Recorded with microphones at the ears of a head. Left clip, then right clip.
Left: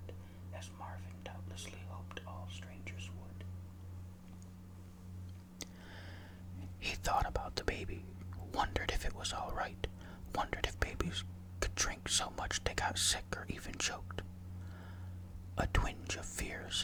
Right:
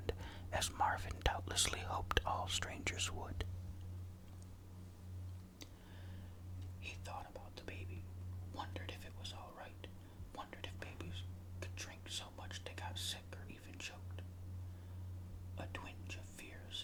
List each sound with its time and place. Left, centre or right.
0.1 s speech: right
6.8 s speech: left
15.5 s speech: left